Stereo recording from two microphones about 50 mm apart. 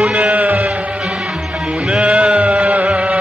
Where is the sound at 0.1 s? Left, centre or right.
Right.